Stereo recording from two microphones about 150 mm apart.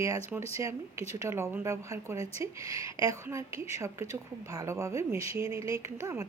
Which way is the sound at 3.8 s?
20° right (ahead or behind).